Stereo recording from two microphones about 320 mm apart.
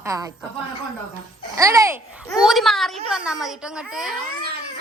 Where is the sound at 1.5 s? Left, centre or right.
Centre.